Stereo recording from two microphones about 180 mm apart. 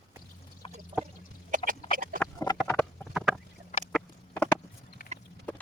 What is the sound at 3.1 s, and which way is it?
Chicken, 5° left (ahead or behind).